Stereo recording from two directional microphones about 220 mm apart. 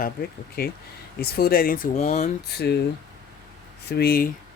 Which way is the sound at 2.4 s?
45° left (ahead or behind).